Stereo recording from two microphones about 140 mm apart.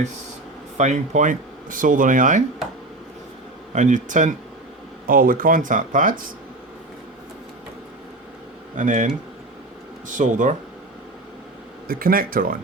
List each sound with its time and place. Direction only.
0.8 s speech: 55° right (ahead or behind)
3.7 s speech: 60° right (ahead or behind)
5.0 s speech: 90° right; by 6.2 s 70° right (ahead or behind)
8.7 s speech: 70° right (ahead or behind)
10.1 s speech: 65° right (ahead or behind)
11.9 s speech: 90° right